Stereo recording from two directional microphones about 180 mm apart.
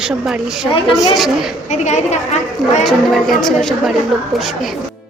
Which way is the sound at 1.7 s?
40° left (ahead or behind).